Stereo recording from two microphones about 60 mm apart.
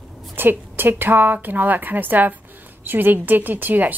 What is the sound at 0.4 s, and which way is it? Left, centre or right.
Speech, right.